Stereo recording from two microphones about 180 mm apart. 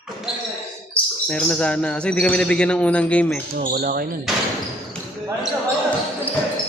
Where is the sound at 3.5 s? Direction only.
55° right (ahead or behind).